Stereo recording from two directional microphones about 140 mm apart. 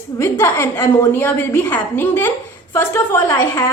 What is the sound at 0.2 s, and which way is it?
A woman's voice, 20° left (ahead or behind).